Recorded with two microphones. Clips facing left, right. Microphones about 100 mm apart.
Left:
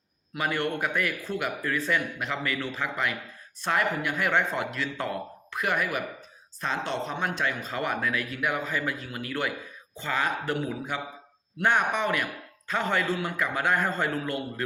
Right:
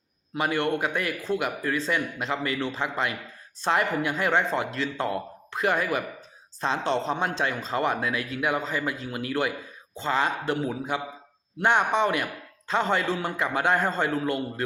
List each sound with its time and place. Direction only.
0.3 s speech: 25° right (ahead or behind)